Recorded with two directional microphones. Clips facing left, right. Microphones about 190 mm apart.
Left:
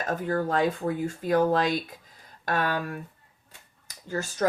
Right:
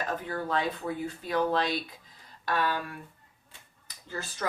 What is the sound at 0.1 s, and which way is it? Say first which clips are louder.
Speech: left 8 dB; 45° left (ahead or behind).